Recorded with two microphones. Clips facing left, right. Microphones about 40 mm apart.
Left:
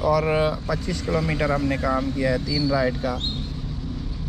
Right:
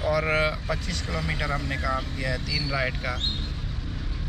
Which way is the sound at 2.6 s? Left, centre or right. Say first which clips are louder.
Left 6 dB; right.